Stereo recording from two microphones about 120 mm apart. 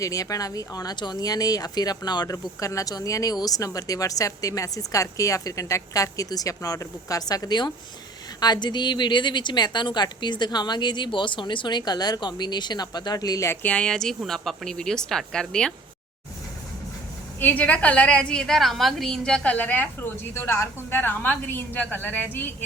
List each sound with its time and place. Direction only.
0.0 s a woman's voice: 30° left (ahead or behind)
13.6 s a woman's voice: 10° left (ahead or behind)
17.4 s a woman's voice: 15° left (ahead or behind)